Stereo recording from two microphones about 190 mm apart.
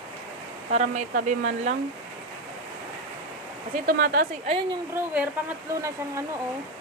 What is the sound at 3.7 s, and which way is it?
Speech, 50° right (ahead or behind).